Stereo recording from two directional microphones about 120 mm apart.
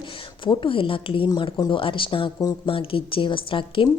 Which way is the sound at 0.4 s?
45° left (ahead or behind).